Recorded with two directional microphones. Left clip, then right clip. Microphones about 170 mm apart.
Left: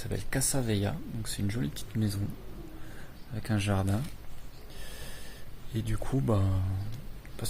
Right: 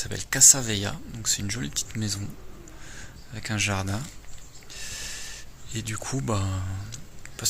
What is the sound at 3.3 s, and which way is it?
Speech, 25° left (ahead or behind).